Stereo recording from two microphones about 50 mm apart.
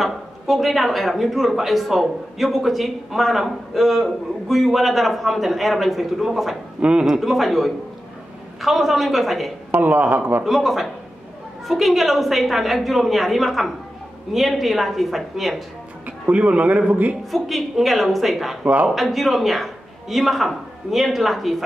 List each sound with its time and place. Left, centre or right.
0.0 s a man's voice: centre
6.8 s speech: centre
7.1 s a man's voice: centre
9.8 s speech: right
10.4 s a man's voice: centre
16.3 s speech: right
17.3 s a man's voice: centre
18.6 s speech: right
18.9 s a man's voice: centre